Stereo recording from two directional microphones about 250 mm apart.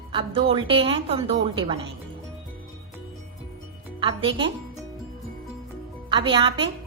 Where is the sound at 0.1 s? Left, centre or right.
Centre.